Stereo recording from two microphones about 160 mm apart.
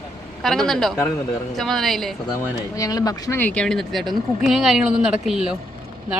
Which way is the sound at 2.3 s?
20° left (ahead or behind).